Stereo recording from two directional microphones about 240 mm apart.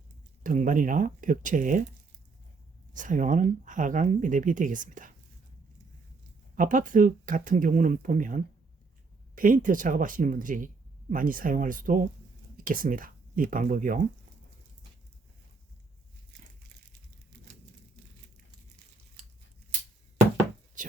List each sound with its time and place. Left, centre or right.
0.4 s speech: right
2.9 s speech: right
6.6 s speech: right